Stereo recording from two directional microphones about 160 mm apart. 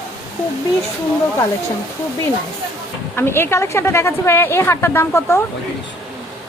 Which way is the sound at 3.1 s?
15° left (ahead or behind).